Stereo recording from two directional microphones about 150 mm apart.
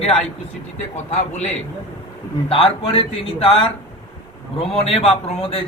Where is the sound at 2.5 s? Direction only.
40° left (ahead or behind).